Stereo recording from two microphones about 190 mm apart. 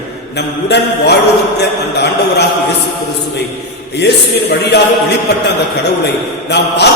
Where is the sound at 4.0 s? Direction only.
60° left (ahead or behind).